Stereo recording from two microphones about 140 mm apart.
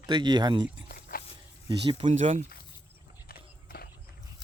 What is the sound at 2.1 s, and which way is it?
Speech, 55° right (ahead or behind).